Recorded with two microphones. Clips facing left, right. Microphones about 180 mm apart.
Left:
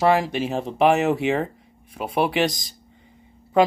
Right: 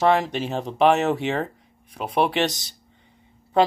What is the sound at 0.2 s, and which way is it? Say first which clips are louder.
Speech: left 2 dB; 5° left (ahead or behind).